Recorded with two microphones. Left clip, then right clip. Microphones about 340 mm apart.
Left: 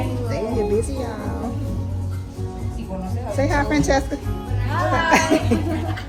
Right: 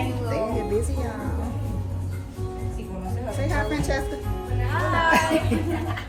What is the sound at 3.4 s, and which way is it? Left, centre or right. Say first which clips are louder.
Speech: left 8 dB; left.